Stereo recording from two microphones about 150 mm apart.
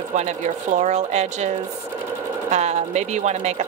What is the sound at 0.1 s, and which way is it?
Speech, 55° right (ahead or behind).